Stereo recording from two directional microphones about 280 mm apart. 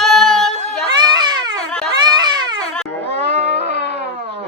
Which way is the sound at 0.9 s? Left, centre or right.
Centre.